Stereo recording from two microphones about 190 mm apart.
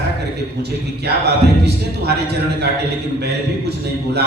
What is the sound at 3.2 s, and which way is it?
A man's voice, 60° right (ahead or behind).